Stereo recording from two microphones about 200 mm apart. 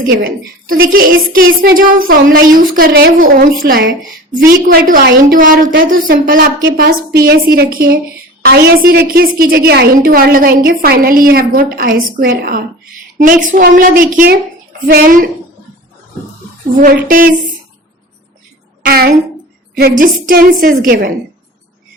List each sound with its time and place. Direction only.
0.0 s a woman's voice: 45° right (ahead or behind)
16.8 s a woman's voice: 45° right (ahead or behind)
18.8 s a child's voice: 50° right (ahead or behind)